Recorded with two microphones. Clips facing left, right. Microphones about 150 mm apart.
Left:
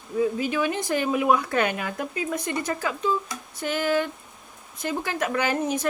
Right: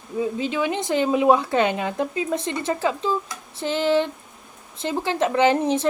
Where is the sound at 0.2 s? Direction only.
25° right (ahead or behind).